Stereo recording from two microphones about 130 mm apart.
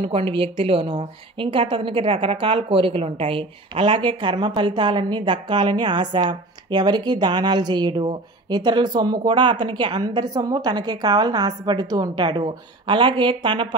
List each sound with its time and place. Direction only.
0.0 s speech: 45° right (ahead or behind)